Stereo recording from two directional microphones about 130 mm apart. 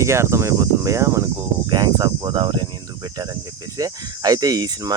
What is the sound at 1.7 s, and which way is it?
Speech, 30° right (ahead or behind).